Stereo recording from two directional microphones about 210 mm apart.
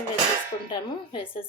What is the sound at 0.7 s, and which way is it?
Speech, 25° left (ahead or behind).